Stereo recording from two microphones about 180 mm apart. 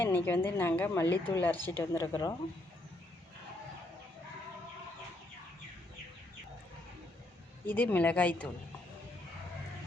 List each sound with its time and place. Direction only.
0.0 s a woman's voice: 10° left (ahead or behind)
7.7 s a woman's voice: 10° left (ahead or behind)